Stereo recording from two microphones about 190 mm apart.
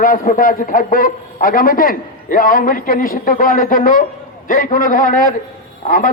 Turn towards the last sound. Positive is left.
turn(degrees=45)  # may be behind; listen again after turning